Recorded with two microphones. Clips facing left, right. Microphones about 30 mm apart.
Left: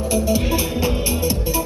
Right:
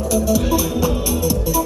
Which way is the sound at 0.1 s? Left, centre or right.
Left.